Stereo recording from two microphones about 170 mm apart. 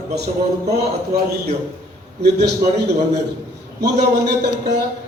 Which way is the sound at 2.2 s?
75° right (ahead or behind).